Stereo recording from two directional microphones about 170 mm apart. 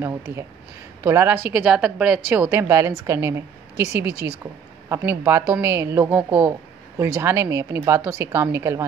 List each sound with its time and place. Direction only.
0.0 s a woman's voice: 15° right (ahead or behind)